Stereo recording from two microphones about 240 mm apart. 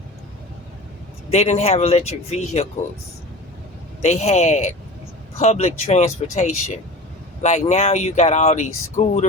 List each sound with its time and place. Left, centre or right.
1.3 s speech: left
4.0 s speech: left